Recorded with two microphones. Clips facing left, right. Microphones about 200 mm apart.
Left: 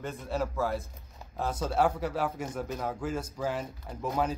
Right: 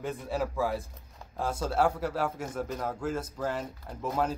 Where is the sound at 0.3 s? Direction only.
10° right (ahead or behind).